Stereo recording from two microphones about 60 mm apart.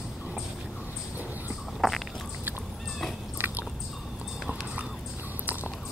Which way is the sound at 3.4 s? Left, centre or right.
Right.